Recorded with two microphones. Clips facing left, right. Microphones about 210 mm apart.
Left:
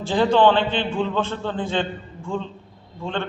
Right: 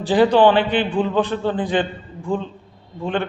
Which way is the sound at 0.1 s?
15° right (ahead or behind).